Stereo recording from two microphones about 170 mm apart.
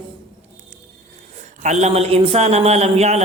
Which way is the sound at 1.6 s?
40° right (ahead or behind).